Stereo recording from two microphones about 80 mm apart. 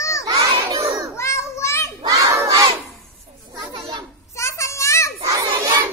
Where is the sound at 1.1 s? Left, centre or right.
Left.